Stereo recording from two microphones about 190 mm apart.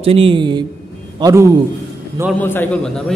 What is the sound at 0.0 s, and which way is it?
A man's voice, 30° right (ahead or behind).